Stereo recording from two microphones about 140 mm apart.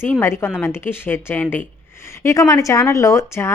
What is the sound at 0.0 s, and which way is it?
A woman's voice, 15° left (ahead or behind).